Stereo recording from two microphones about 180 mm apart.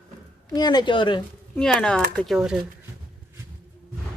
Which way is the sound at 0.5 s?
25° left (ahead or behind).